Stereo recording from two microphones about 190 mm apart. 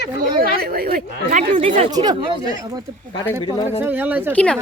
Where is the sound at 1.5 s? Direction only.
30° right (ahead or behind).